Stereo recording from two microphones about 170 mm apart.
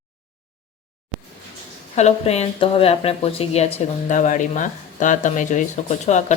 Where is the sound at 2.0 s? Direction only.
40° left (ahead or behind).